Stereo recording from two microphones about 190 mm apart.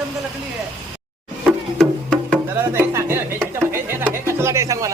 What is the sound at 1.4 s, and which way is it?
Music, 5° left (ahead or behind).